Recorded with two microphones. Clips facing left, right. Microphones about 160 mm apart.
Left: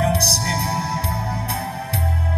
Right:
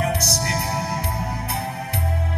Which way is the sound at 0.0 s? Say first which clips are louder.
Left 3 dB; 30° left (ahead or behind).